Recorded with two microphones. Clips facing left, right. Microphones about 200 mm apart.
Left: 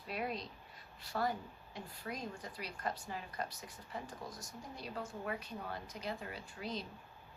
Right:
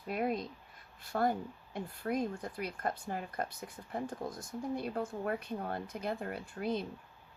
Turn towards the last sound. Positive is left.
turn(degrees=-55)  # may be behind; listen again after turning